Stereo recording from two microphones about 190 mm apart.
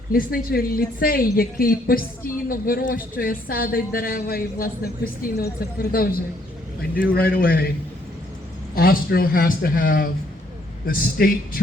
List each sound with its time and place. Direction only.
0.1 s a woman's voice: 50° left (ahead or behind)
8.7 s a woman's voice: 50° left (ahead or behind)